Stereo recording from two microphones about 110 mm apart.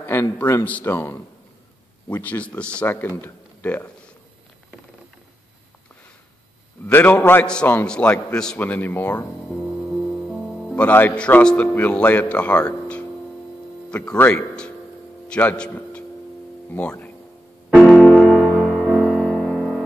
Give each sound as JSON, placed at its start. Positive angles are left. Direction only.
{"t": 0.0, "sound": "a man's voice", "side_deg": 20}
{"t": 6.9, "sound": "a man's voice", "side_deg": 20}
{"t": 10.8, "sound": "a man's voice", "side_deg": 15}
{"t": 17.7, "sound": "music", "side_deg": 5}
{"t": 18.2, "sound": "music", "side_deg": -5}